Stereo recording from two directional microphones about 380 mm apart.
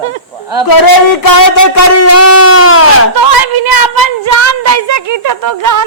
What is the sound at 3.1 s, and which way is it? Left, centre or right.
Child singing, right.